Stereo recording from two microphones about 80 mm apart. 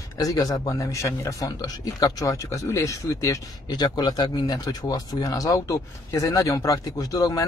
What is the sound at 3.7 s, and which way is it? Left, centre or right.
Speech, left.